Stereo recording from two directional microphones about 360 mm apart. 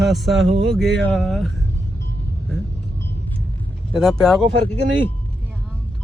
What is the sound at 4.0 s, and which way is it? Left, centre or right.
Speech, centre.